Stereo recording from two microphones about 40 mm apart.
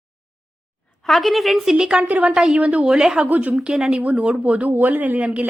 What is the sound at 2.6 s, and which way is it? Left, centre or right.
Speech, right.